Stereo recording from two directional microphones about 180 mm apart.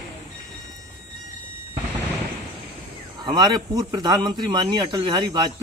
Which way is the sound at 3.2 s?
25° right (ahead or behind).